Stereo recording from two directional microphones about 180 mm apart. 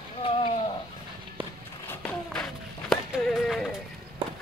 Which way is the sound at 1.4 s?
25° right (ahead or behind).